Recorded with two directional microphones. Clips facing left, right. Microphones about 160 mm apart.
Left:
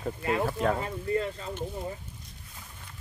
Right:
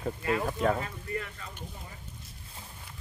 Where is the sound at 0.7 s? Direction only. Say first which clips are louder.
Left 6 dB; 30° left (ahead or behind).